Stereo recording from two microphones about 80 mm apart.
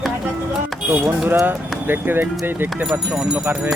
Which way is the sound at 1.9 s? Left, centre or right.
Right.